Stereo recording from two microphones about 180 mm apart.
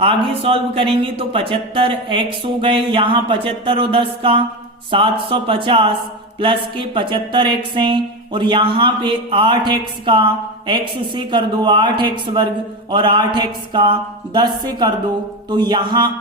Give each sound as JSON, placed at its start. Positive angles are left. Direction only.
{"t": 0.0, "sound": "speech", "side_deg": -30}